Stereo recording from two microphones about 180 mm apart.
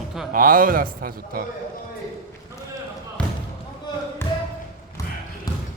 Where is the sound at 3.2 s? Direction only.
5° left (ahead or behind).